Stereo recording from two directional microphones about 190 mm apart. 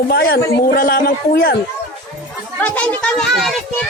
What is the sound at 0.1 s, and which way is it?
A woman's voice, 55° left (ahead or behind).